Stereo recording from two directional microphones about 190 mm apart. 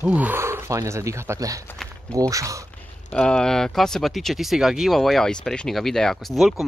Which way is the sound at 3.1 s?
5° left (ahead or behind).